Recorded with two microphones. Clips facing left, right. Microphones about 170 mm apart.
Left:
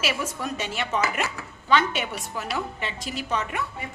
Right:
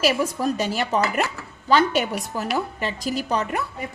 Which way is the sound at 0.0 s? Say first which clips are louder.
Right 7 dB; 40° right (ahead or behind).